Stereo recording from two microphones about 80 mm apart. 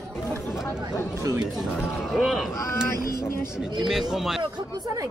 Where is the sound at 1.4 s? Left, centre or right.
Centre.